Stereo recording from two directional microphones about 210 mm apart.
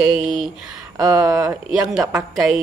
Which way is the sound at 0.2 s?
Centre (ahead or behind).